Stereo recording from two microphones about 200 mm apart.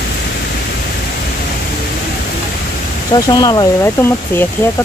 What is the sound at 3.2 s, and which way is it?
Speech, 20° left (ahead or behind).